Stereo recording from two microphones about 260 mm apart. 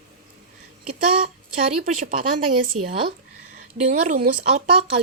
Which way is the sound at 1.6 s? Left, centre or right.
Right.